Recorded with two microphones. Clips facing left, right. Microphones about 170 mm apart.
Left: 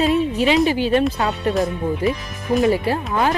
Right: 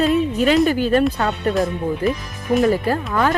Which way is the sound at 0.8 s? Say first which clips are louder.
Right 1 dB; 45° right (ahead or behind).